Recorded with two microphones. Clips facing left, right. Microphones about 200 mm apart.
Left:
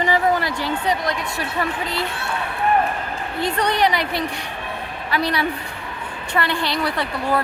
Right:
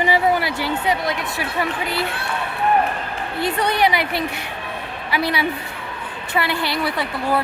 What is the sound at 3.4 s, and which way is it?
A woman's voice, 5° right (ahead or behind).